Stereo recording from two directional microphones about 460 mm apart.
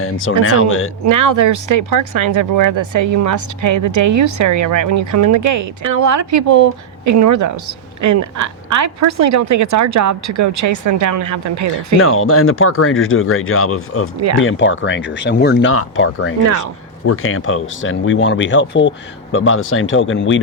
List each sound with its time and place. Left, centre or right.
0.0 s speech: left
1.0 s speech: right
11.9 s speech: left